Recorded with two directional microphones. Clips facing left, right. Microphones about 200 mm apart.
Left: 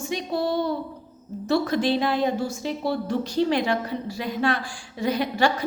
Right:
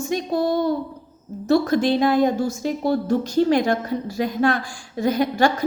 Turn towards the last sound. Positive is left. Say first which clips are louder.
# right 4 dB
turn(degrees=-45)  # may be behind; listen again after turning